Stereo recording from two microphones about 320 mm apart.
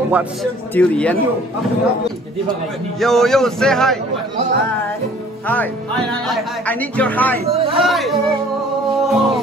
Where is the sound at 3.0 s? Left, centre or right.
Centre.